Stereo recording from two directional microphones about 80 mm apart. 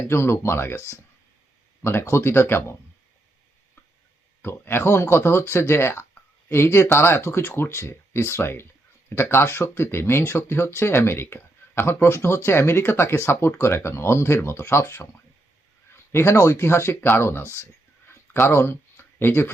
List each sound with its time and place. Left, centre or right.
0.1 s speech: left
1.8 s speech: left
4.4 s speech: left
16.1 s speech: left
17.4 s speech: right
18.1 s a sound: left